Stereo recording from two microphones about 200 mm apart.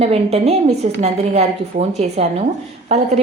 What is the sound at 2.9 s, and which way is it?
Speech, 35° right (ahead or behind).